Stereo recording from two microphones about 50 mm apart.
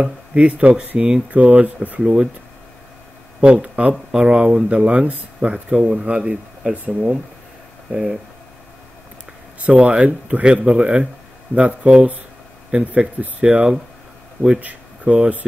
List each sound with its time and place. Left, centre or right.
0.0 s speech: right
2.0 s speech: centre
3.5 s speech: right
9.6 s speech: right